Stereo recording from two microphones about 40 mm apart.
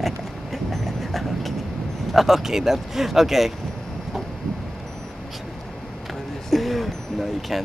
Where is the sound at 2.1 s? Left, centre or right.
Centre.